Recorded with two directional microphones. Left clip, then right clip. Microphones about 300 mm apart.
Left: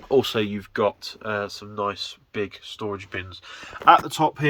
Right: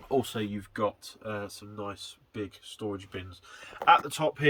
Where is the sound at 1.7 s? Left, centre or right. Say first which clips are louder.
Left 13 dB; left.